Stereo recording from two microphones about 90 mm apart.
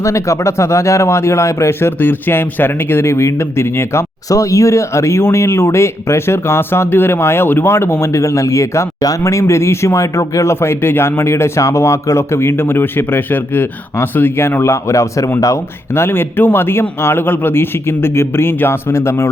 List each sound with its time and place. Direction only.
0.0 s speech: 35° left (ahead or behind)
16.0 s speech: 25° left (ahead or behind)